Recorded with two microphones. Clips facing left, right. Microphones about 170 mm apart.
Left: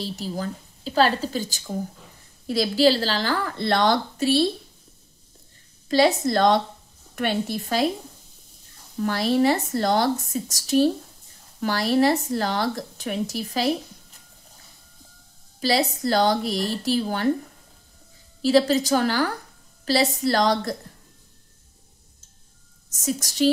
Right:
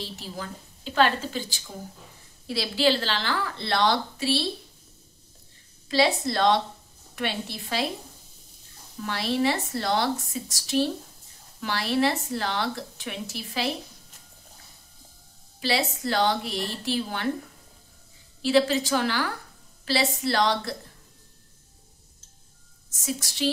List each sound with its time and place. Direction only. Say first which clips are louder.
0.0 s a woman's voice: left 7 dB; 40° left (ahead or behind)
5.9 s a woman's voice: left 4 dB; 45° left (ahead or behind)
9.0 s a woman's voice: left 5 dB; 40° left (ahead or behind)
15.6 s speech: left 4 dB; 40° left (ahead or behind)
18.4 s speech: left 3 dB; 40° left (ahead or behind)
22.9 s speech: left 6 dB; 40° left (ahead or behind)